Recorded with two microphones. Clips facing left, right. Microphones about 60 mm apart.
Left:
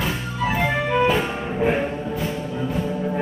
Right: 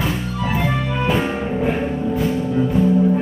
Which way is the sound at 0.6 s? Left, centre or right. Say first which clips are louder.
Left 3 dB; centre.